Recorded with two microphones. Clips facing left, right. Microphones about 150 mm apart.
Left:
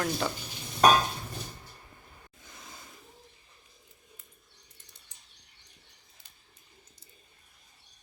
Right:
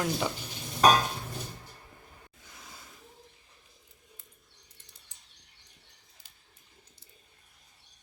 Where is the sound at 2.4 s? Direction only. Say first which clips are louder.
Left 2 dB; 10° right (ahead or behind).